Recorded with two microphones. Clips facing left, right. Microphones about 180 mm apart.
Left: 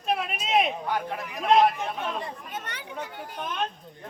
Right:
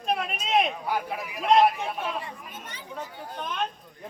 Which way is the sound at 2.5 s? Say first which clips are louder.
Left 4 dB; 70° left (ahead or behind).